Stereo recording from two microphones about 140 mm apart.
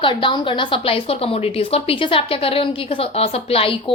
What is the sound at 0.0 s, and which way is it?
A woman's voice, 35° left (ahead or behind).